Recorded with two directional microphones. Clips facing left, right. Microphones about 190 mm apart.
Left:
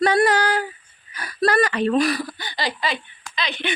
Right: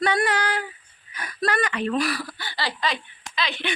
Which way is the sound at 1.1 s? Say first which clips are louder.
Left 6 dB; 35° left (ahead or behind).